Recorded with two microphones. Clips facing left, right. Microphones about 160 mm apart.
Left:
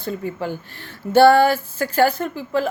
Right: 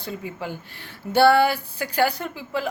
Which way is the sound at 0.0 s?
45° left (ahead or behind).